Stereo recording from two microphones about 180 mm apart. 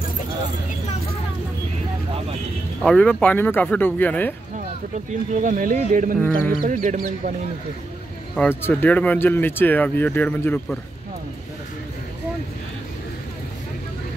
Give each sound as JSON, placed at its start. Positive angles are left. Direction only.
{"t": 2.8, "sound": "speech", "side_deg": 5}
{"t": 5.3, "sound": "speech", "side_deg": -45}
{"t": 6.1, "sound": "speech", "side_deg": 10}
{"t": 6.6, "sound": "speech", "side_deg": -45}
{"t": 8.4, "sound": "speech", "side_deg": 10}